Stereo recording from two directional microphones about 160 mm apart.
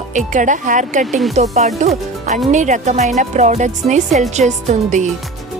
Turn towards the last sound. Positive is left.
turn(degrees=-50)  # may be behind; listen again after turning